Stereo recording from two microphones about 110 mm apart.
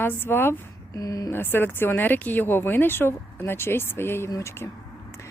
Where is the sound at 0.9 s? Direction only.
35° left (ahead or behind).